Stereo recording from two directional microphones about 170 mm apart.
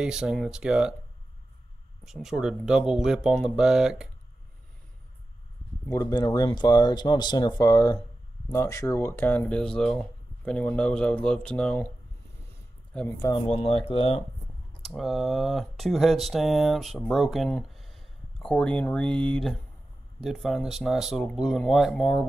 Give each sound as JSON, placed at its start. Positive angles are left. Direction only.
{"t": 0.0, "sound": "speech", "side_deg": -5}
{"t": 2.0, "sound": "speech", "side_deg": -5}
{"t": 5.9, "sound": "speech", "side_deg": 20}
{"t": 13.0, "sound": "speech", "side_deg": 15}
{"t": 13.5, "sound": "speech", "side_deg": 35}
{"t": 14.8, "sound": "speech", "side_deg": 0}